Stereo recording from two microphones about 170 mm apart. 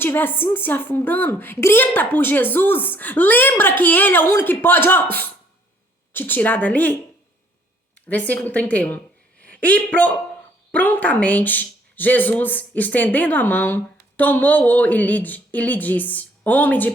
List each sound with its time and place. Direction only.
0.0 s speech: 10° left (ahead or behind)
8.0 s speech: 10° left (ahead or behind)